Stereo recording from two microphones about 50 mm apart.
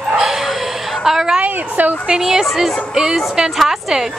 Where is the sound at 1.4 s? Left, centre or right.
Right.